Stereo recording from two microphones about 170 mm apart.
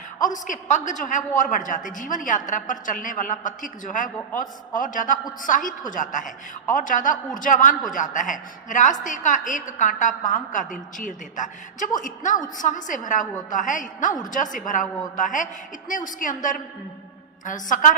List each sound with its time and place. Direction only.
0.2 s a woman's voice: 50° left (ahead or behind)